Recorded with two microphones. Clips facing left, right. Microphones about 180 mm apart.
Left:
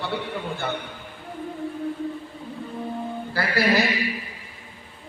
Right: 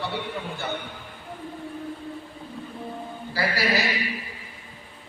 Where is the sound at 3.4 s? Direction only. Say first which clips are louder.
Right 1 dB; 55° left (ahead or behind).